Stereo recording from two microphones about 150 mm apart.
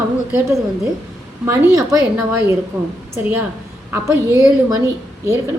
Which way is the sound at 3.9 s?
20° right (ahead or behind).